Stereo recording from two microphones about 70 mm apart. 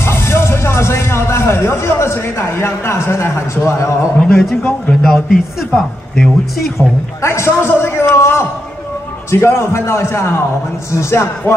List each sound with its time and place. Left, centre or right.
0.0 s music: left
4.2 s speech: centre
5.8 s a woman's voice: centre
7.2 s a man's voice: left